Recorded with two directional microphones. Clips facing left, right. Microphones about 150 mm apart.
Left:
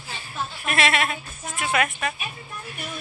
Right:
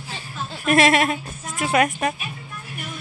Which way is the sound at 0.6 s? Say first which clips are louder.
Right 7 dB; 40° right (ahead or behind).